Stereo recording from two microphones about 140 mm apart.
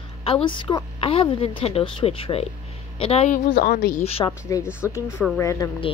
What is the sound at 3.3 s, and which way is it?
Speech, 75° left (ahead or behind).